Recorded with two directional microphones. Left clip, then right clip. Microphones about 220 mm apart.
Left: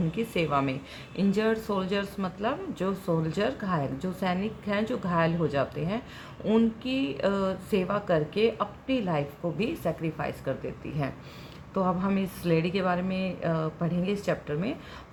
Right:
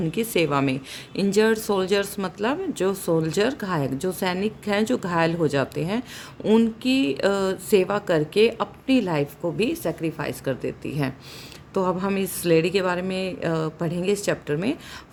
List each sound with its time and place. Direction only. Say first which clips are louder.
0.1 s speech: right 5 dB; 55° right (ahead or behind)